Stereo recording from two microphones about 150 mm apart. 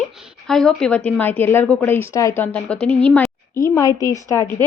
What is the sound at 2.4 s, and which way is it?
Speech, 10° left (ahead or behind).